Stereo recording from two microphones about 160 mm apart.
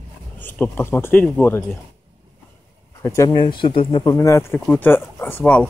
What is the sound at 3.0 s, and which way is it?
Speech, 20° left (ahead or behind).